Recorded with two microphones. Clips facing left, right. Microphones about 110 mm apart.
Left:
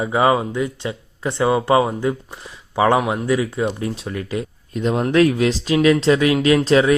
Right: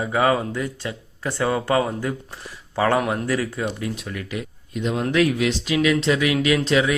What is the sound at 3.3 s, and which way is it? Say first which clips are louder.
Speech: left 5 dB; 20° left (ahead or behind).